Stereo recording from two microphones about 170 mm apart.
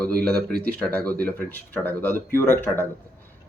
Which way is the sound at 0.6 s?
10° left (ahead or behind).